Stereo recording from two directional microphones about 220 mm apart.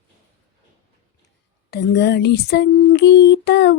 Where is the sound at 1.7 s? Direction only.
50° left (ahead or behind).